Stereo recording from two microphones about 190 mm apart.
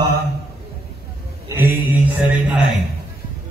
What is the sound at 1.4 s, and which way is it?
A man's voice, 10° right (ahead or behind).